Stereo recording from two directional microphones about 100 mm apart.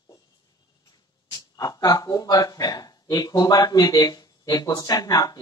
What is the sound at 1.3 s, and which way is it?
Speech, 40° left (ahead or behind).